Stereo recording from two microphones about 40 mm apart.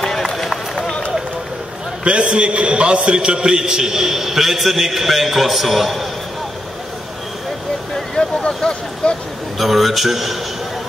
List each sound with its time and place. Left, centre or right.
0.0 s run: centre
2.0 s a man's voice: right; by 6.0 s centre
7.9 s a sound: centre
9.6 s a man's voice: centre